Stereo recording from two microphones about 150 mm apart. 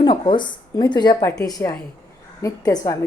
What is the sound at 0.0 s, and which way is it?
A woman's voice, 30° left (ahead or behind).